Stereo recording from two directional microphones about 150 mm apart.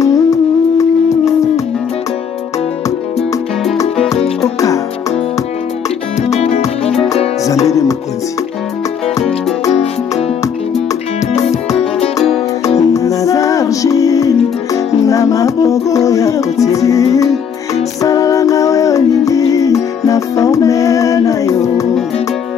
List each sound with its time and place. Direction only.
0.0 s humming: 20° left (ahead or behind)
6.2 s music: 45° left (ahead or behind)
9.7 s music: 45° left (ahead or behind)
11.4 s music: 45° left (ahead or behind)
12.9 s music: 20° left (ahead or behind)